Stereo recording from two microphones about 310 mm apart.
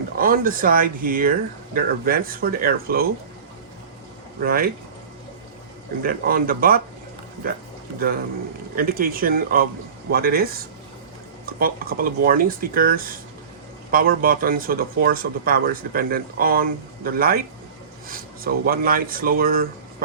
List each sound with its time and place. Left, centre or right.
0.2 s speech: right
4.4 s speech: right
6.0 s speech: right
8.7 s speech: right
18.4 s speech: right